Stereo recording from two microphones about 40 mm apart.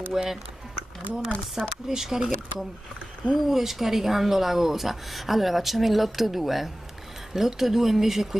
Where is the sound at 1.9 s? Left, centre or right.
Centre.